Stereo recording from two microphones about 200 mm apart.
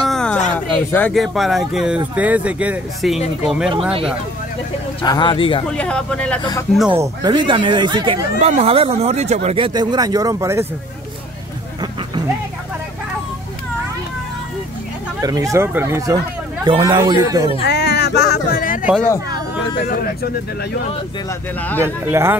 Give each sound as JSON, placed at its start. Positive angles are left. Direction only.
{"t": 0.0, "sound": "a sound", "side_deg": 5}
{"t": 0.6, "sound": "speech", "side_deg": 5}
{"t": 5.0, "sound": "a man's voice", "side_deg": 20}
{"t": 5.7, "sound": "speech", "side_deg": 5}
{"t": 7.0, "sound": "speech", "side_deg": -20}
{"t": 9.8, "sound": "speech", "side_deg": -20}
{"t": 15.2, "sound": "speech", "side_deg": -15}
{"t": 16.6, "sound": "speech", "side_deg": -25}
{"t": 17.6, "sound": "speech", "side_deg": 55}
{"t": 21.3, "sound": "a man's voice", "side_deg": 10}
{"t": 21.8, "sound": "speech", "side_deg": -10}